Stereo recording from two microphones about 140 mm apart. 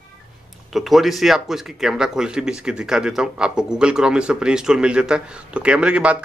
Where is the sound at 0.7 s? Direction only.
Centre (ahead or behind).